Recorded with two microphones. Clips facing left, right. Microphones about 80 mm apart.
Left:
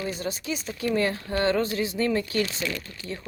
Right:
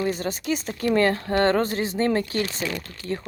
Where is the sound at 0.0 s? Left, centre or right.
Right.